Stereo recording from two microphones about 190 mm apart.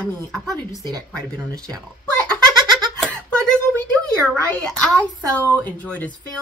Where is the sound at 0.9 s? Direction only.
20° right (ahead or behind).